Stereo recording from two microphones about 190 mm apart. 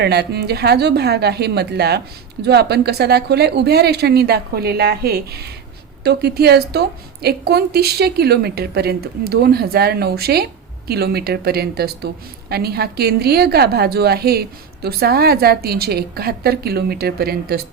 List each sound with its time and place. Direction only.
0.0 s a woman's voice: 60° right (ahead or behind)